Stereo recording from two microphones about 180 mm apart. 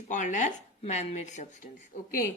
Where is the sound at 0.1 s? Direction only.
45° left (ahead or behind).